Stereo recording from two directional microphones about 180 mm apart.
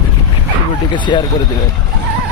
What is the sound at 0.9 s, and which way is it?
Speech, 25° left (ahead or behind).